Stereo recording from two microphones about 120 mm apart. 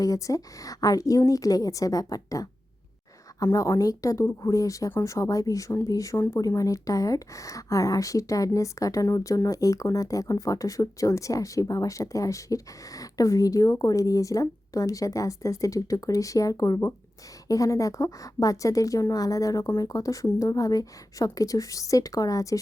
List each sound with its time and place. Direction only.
0.0 s speech: 30° left (ahead or behind)